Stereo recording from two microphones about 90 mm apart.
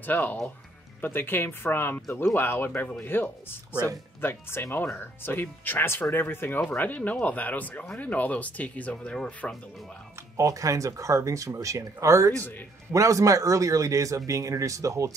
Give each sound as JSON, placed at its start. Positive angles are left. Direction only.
{"t": 0.0, "sound": "speech", "side_deg": 20}
{"t": 3.7, "sound": "speech", "side_deg": -40}
{"t": 4.2, "sound": "speech", "side_deg": 25}
{"t": 10.3, "sound": "speech", "side_deg": -35}